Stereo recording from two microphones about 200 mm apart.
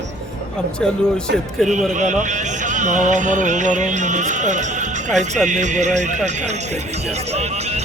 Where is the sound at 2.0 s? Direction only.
35° right (ahead or behind).